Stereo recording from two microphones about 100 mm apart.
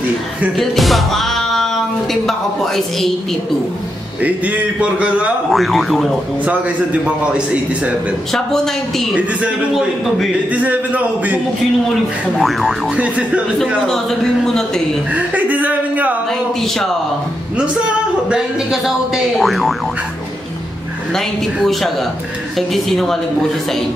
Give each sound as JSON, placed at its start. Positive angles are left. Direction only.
{"t": 0.6, "sound": "music", "side_deg": 0}
{"t": 2.2, "sound": "speech", "side_deg": 5}
{"t": 4.2, "sound": "a man's voice", "side_deg": -15}
{"t": 5.5, "sound": "speech", "side_deg": 0}
{"t": 8.3, "sound": "speech", "side_deg": 5}
{"t": 9.1, "sound": "a man's voice", "side_deg": -15}
{"t": 11.9, "sound": "speech", "side_deg": 0}
{"t": 12.9, "sound": "a man's voice", "side_deg": -10}
{"t": 13.8, "sound": "speech", "side_deg": 5}
{"t": 15.1, "sound": "a man's voice", "side_deg": -15}
{"t": 17.6, "sound": "speech", "side_deg": -10}
{"t": 21.1, "sound": "speech", "side_deg": 0}